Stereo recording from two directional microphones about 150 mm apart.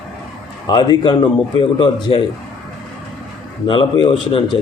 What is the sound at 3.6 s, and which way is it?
Speech, 35° left (ahead or behind).